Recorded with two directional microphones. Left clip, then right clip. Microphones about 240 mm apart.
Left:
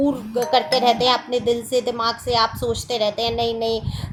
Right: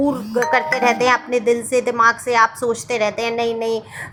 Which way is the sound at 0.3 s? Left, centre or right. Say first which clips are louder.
Right 1 dB; centre.